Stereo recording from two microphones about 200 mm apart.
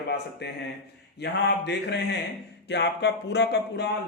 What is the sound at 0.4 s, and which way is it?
Speech, 60° left (ahead or behind).